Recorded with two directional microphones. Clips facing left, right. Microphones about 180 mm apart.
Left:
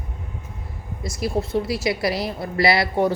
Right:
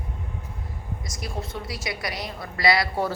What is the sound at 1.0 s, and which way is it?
A woman's voice, 30° left (ahead or behind).